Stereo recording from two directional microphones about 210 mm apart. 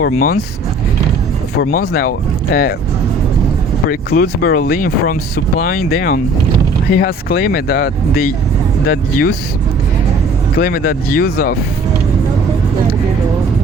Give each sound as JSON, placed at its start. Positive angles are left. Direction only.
{"t": 0.0, "sound": "speech", "side_deg": 45}
{"t": 1.5, "sound": "speech", "side_deg": 50}
{"t": 3.8, "sound": "speech", "side_deg": 45}
{"t": 10.6, "sound": "speech", "side_deg": 45}